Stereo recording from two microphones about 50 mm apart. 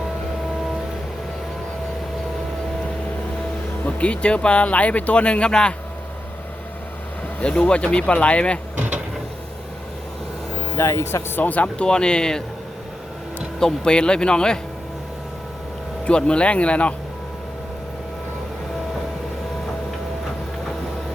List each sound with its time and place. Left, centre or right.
3.8 s speech: left
7.3 s speech: left
10.8 s speech: left
11.3 s speech: left; by 12.4 s centre
13.6 s speech: centre
16.0 s speech: left